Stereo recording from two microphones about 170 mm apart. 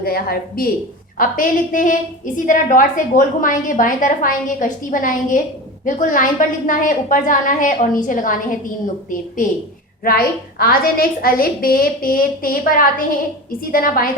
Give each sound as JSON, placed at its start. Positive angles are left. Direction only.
{"t": 0.0, "sound": "a woman's voice", "side_deg": 65}
{"t": 10.0, "sound": "a woman's voice", "side_deg": 60}